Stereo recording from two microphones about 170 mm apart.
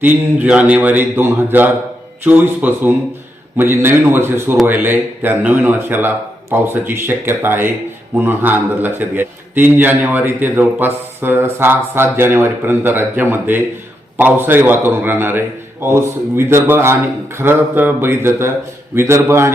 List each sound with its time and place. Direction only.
0.0 s a man's voice: 10° right (ahead or behind)